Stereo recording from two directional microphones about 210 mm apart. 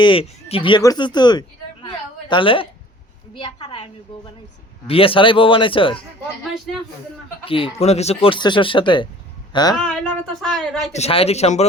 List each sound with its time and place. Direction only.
0.0 s speech: 25° left (ahead or behind)
4.9 s speech: 25° left (ahead or behind)
7.4 s a woman's voice: 25° left (ahead or behind)
10.4 s speech: centre (ahead or behind)
10.9 s speech: 30° left (ahead or behind)